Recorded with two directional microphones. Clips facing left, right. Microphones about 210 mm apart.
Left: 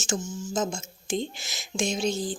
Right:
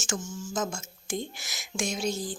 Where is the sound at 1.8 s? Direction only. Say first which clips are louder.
Left 3 dB; 25° left (ahead or behind).